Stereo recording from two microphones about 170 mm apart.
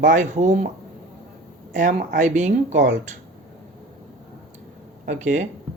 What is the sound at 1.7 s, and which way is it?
Speech, 45° right (ahead or behind).